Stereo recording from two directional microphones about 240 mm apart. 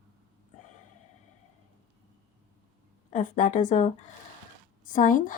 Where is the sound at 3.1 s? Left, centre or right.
Left.